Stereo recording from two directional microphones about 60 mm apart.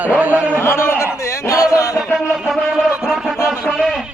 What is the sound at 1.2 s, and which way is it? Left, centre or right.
Music, left.